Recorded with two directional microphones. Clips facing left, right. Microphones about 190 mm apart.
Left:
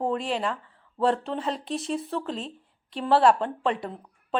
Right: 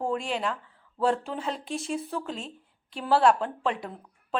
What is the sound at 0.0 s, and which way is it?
A woman's voice, centre (ahead or behind).